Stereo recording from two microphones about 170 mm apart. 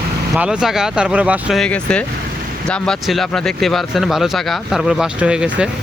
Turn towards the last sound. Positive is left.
turn(degrees=-5)  # may be behind; listen again after turning